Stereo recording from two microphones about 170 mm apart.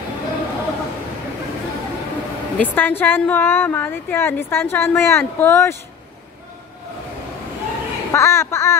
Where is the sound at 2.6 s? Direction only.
10° left (ahead or behind).